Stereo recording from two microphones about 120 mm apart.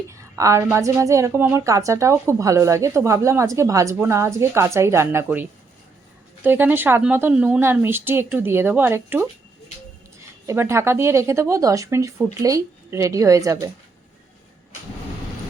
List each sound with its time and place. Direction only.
0.1 s a woman's voice: 25° right (ahead or behind)
10.4 s a woman's voice: 20° right (ahead or behind)